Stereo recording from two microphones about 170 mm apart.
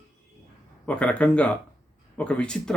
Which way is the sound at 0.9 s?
5° left (ahead or behind).